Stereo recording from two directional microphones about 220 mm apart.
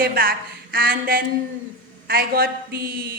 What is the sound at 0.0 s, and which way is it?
A woman's voice, 40° right (ahead or behind).